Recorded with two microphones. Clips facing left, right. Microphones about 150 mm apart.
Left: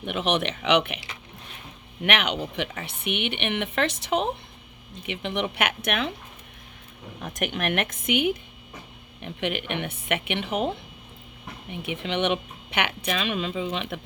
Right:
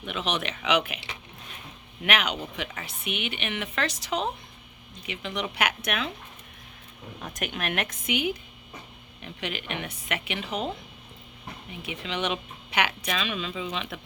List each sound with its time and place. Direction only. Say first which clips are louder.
0.0 s speech: left 5 dB; 60° left (ahead or behind)
2.0 s speech: left 2 dB; 60° left (ahead or behind)
7.2 s a woman's voice: left 4 dB; 50° left (ahead or behind)
11.8 s speech: left 5 dB; 60° left (ahead or behind)